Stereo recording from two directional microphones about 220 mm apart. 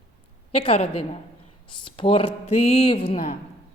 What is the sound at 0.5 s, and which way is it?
A woman's voice, 25° left (ahead or behind).